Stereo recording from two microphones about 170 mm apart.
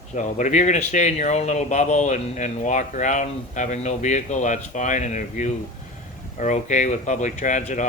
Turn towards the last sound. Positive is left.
turn(degrees=45)  # may be behind; listen again after turning